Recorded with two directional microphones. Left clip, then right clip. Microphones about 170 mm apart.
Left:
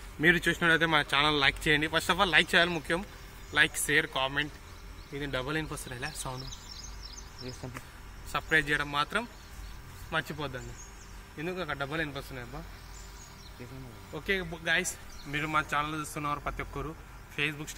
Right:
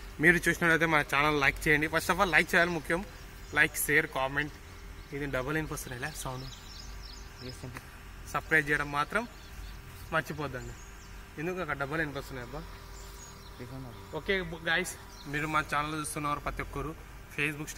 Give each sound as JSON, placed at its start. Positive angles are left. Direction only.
{"t": 0.2, "sound": "speech", "side_deg": -10}
{"t": 8.3, "sound": "speech", "side_deg": 0}
{"t": 12.0, "sound": "a man's voice", "side_deg": 20}
{"t": 14.1, "sound": "speech", "side_deg": 85}
{"t": 15.5, "sound": "speech", "side_deg": -5}